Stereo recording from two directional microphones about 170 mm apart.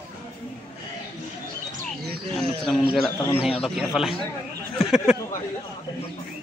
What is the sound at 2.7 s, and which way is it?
Speech, centre (ahead or behind).